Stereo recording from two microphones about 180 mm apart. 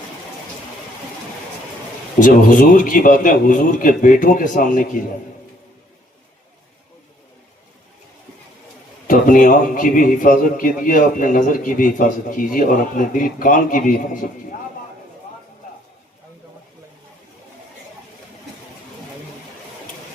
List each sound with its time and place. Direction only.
2.1 s a man's voice: 45° left (ahead or behind)
9.0 s a man's voice: 50° left (ahead or behind)